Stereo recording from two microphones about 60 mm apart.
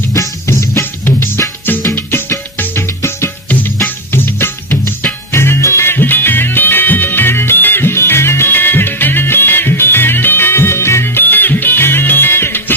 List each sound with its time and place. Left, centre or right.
0.1 s music: left
0.7 s music: left